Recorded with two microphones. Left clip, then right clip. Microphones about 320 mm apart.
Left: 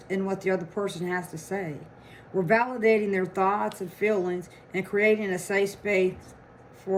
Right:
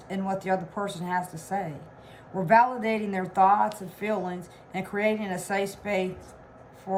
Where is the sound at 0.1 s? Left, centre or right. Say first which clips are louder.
Left 1 dB; right.